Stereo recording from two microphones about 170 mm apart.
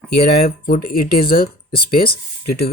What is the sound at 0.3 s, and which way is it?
Speech, 65° left (ahead or behind).